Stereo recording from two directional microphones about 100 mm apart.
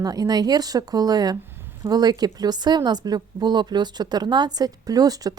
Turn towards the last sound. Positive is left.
turn(degrees=-40)  # may be behind; listen again after turning